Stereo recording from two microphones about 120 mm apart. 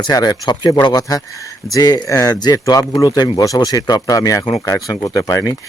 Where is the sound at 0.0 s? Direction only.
35° left (ahead or behind).